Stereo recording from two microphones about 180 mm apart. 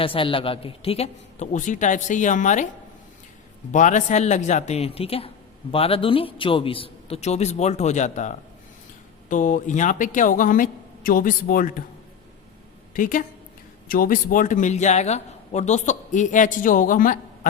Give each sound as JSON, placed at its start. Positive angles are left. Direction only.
{"t": 0.0, "sound": "a man's voice", "side_deg": 30}
{"t": 3.7, "sound": "a man's voice", "side_deg": 45}
{"t": 12.9, "sound": "a woman's voice", "side_deg": 50}